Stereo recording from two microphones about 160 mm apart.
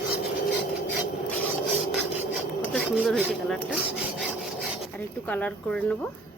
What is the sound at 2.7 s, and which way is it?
Wood, 5° right (ahead or behind).